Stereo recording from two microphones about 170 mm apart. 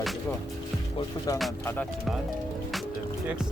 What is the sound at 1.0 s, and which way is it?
Music, 20° left (ahead or behind).